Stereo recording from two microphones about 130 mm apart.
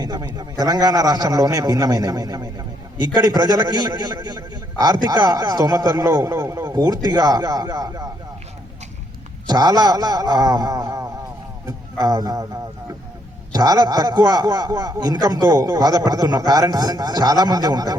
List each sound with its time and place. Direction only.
0.0 s a man's voice: 30° right (ahead or behind)
9.5 s a man's voice: 30° right (ahead or behind)
13.5 s a man's voice: 30° right (ahead or behind)